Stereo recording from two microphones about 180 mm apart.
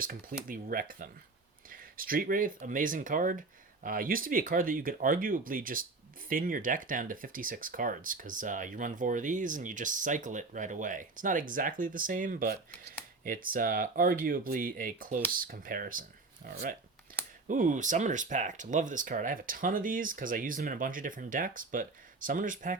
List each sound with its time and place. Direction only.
0.0 s speech: 50° right (ahead or behind)